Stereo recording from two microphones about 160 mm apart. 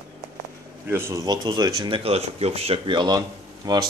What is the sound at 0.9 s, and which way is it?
Speech, 20° right (ahead or behind).